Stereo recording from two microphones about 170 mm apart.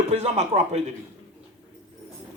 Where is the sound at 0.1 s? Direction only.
40° right (ahead or behind).